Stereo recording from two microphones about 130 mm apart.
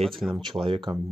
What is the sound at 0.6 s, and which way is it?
Speech, 40° right (ahead or behind).